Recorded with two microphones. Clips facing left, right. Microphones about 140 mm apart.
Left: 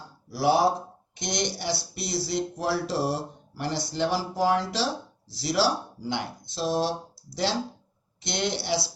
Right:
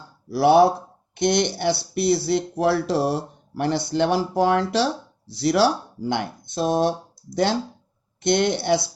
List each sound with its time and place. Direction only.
0.3 s speech: 60° right (ahead or behind)